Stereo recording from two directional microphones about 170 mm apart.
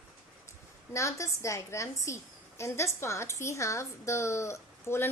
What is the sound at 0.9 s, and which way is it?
A woman's voice, 15° left (ahead or behind).